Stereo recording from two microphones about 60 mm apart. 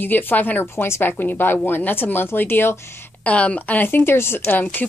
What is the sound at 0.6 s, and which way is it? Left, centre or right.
Speech, left.